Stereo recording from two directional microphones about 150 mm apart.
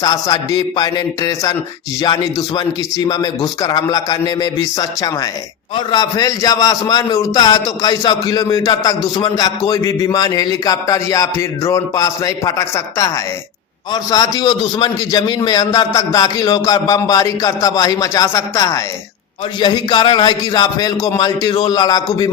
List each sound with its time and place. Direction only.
0.0 s a man's voice: 25° left (ahead or behind)
2.6 s a man's voice: 25° left (ahead or behind)